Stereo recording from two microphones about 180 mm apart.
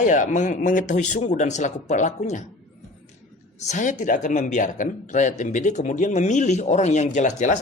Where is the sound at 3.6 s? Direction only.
40° left (ahead or behind).